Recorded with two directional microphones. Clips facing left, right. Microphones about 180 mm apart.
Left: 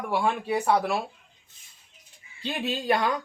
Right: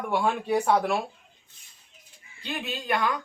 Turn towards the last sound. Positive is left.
turn(degrees=30)  # may be behind; listen again after turning